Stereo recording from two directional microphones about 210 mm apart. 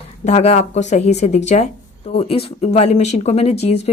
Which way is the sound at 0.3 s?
35° left (ahead or behind).